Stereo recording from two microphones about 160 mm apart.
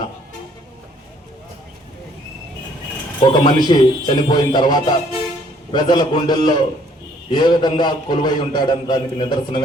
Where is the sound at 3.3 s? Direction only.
25° left (ahead or behind).